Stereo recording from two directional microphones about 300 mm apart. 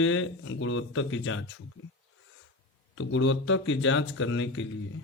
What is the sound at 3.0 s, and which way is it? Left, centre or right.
Speech, left.